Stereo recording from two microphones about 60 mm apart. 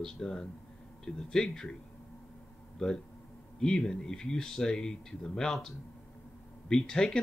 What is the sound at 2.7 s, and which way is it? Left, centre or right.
Speech, centre.